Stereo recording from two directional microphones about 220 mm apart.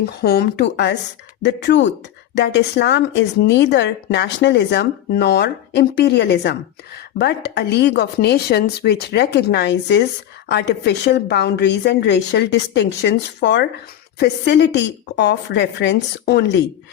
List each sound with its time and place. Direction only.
0.0 s a woman's voice: 45° left (ahead or behind)